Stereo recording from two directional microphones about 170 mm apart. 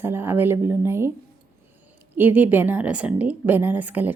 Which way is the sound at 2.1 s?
10° right (ahead or behind).